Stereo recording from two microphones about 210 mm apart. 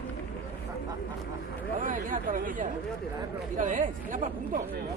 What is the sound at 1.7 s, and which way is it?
Speech, 40° right (ahead or behind).